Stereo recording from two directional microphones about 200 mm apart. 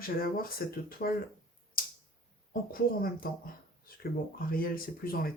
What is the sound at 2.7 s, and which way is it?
Speech, 45° left (ahead or behind).